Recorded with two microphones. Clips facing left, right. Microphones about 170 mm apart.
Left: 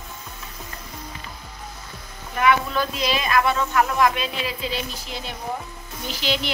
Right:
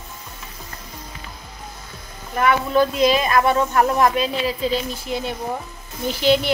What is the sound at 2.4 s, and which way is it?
Speech, 45° right (ahead or behind).